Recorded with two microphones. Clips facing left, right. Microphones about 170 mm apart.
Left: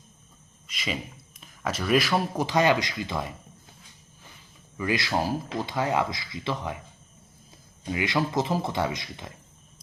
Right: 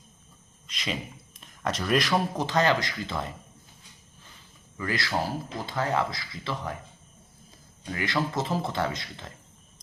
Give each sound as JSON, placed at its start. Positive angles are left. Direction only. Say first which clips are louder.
{"t": 0.7, "sound": "a sound", "louder": "left 1 dB", "side_deg": 5}
{"t": 1.4, "sound": "speech", "louder": "even", "side_deg": 5}
{"t": 4.8, "sound": "speech", "louder": "left 3 dB", "side_deg": 15}
{"t": 7.9, "sound": "speech", "louder": "left 2 dB", "side_deg": 15}